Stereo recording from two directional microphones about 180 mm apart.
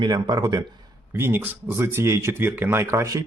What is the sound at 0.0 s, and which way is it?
Speech, 20° right (ahead or behind).